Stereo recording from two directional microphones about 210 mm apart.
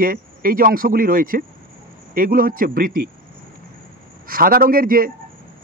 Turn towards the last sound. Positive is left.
turn(degrees=-45)  # may be behind; listen again after turning